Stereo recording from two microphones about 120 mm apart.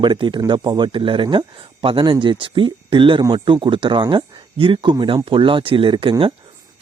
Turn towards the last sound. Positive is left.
turn(degrees=-45)  # may be behind; listen again after turning